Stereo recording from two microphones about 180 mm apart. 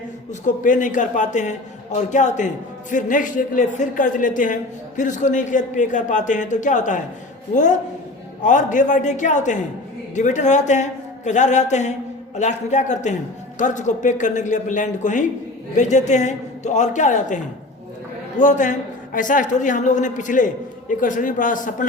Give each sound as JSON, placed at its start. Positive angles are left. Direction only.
{"t": 0.4, "sound": "a man's voice", "side_deg": 45}